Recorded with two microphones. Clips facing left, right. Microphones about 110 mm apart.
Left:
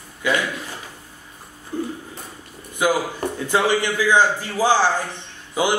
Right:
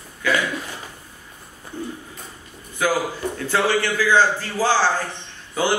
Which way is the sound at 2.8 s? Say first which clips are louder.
Left 1 dB; 15° left (ahead or behind).